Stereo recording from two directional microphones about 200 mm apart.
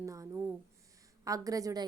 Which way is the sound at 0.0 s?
15° right (ahead or behind).